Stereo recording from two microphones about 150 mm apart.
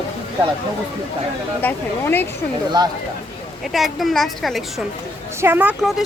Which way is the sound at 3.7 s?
Centre (ahead or behind).